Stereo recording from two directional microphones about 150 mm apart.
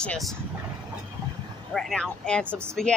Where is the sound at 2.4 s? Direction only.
15° right (ahead or behind).